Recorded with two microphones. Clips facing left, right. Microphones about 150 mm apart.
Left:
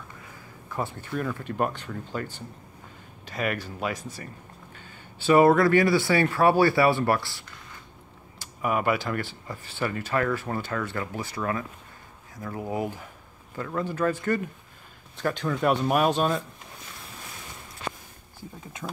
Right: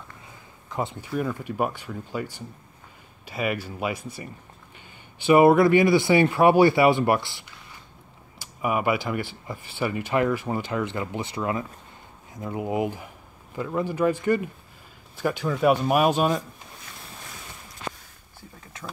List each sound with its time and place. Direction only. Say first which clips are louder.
0.7 s speech: right 2 dB; 20° right (ahead or behind)